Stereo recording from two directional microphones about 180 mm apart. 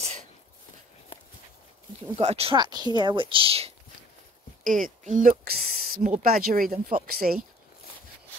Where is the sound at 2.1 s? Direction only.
35° right (ahead or behind).